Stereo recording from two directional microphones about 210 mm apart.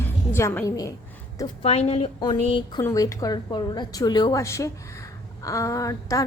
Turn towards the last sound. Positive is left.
turn(degrees=15)  # may be behind; listen again after turning